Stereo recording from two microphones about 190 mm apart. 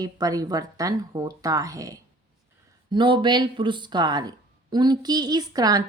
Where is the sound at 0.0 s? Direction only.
20° right (ahead or behind).